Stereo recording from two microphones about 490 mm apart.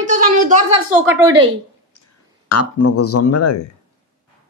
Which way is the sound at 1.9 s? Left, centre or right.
Left.